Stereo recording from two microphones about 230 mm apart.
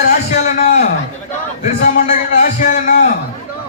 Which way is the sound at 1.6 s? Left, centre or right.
Left.